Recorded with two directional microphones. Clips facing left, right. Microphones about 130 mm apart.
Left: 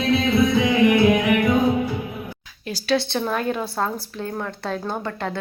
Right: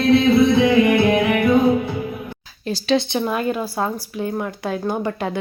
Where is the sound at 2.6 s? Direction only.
25° right (ahead or behind).